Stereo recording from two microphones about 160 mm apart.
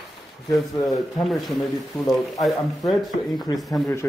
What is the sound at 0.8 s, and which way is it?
Speech, centre (ahead or behind).